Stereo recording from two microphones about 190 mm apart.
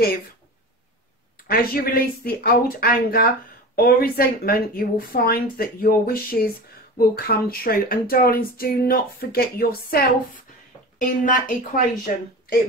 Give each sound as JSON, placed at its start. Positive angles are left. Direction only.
{"t": 1.5, "sound": "speech", "side_deg": 50}